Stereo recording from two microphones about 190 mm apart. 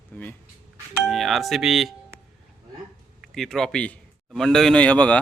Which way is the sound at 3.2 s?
Centre (ahead or behind).